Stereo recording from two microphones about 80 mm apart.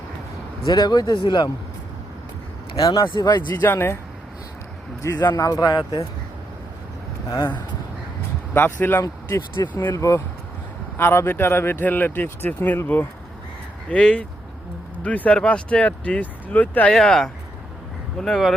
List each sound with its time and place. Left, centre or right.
0.6 s speech: left
2.8 s speech: left
3.6 s speech: left
5.0 s speech: left
8.5 s speech: left
16.9 s speech: centre